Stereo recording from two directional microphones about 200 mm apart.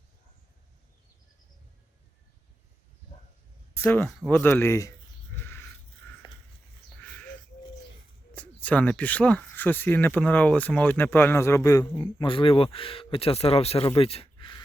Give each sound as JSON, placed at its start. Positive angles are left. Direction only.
{"t": 3.8, "sound": "speech", "side_deg": 10}
{"t": 4.3, "sound": "a sound", "side_deg": 10}
{"t": 6.2, "sound": "a sound", "side_deg": 25}
{"t": 7.0, "sound": "crow", "side_deg": 5}
{"t": 8.4, "sound": "speech", "side_deg": 5}
{"t": 12.2, "sound": "speech", "side_deg": 25}